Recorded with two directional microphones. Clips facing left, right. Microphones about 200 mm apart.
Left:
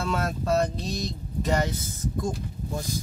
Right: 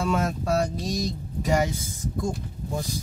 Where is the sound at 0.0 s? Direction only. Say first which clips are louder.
Right 3 dB; 15° right (ahead or behind).